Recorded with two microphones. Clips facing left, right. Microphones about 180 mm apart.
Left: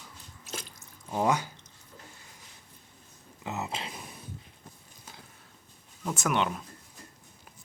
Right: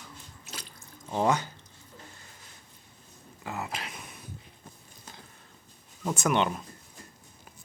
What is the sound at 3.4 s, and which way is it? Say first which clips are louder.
Speech: left 1 dB; 20° left (ahead or behind).